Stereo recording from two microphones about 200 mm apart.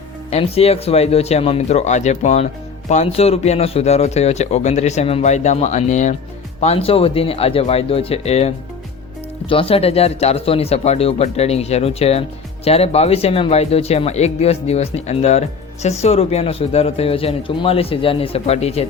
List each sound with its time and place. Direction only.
0.3 s speech: 30° left (ahead or behind)